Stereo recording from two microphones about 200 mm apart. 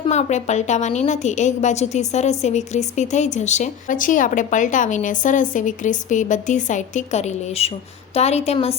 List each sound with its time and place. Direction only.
0.1 s speech: 35° left (ahead or behind)